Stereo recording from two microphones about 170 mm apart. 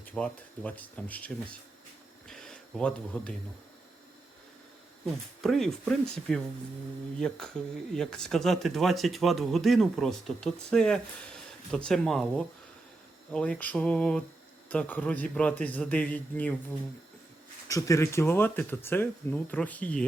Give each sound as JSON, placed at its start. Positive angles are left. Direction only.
{"t": 0.0, "sound": "speech", "side_deg": 10}
{"t": 2.2, "sound": "a sound", "side_deg": 0}
{"t": 5.4, "sound": "speech", "side_deg": 0}
{"t": 17.7, "sound": "speech", "side_deg": 20}